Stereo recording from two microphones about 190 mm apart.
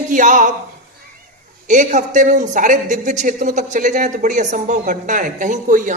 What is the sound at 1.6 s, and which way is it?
Speech, 40° right (ahead or behind).